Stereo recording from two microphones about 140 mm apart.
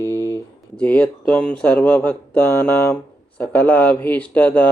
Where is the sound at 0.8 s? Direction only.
10° left (ahead or behind).